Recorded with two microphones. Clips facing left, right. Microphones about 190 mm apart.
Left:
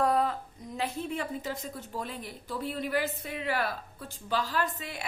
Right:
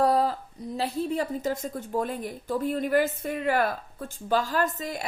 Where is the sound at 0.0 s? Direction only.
35° right (ahead or behind).